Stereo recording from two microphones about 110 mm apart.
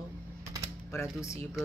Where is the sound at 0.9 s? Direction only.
25° left (ahead or behind).